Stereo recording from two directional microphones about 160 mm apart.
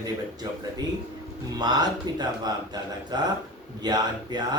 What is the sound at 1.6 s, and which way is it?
A man's voice, 25° right (ahead or behind).